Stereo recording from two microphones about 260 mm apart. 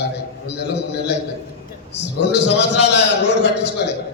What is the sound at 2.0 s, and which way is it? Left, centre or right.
A man's voice, left.